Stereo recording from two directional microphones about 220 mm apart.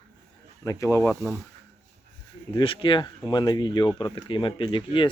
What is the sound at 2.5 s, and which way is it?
Speech, 25° left (ahead or behind).